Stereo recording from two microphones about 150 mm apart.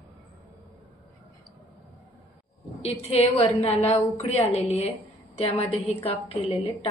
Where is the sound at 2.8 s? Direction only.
40° left (ahead or behind).